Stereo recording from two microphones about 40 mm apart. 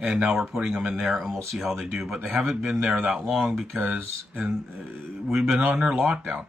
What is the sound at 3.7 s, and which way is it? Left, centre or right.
Speech, right.